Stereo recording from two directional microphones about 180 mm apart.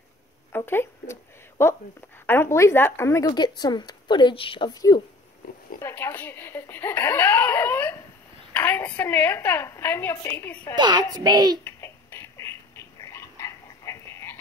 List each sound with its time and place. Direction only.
0.5 s a woman's voice: 10° left (ahead or behind)
5.4 s oink: 55° left (ahead or behind)
5.8 s speech: 15° left (ahead or behind)
10.8 s a child's voice: 25° right (ahead or behind)
11.6 s a sound: 15° left (ahead or behind)